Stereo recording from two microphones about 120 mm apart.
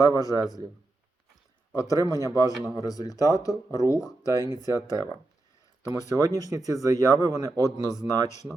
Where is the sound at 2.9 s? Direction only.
30° left (ahead or behind).